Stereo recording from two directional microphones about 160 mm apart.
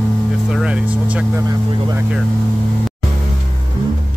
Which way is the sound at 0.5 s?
5° right (ahead or behind).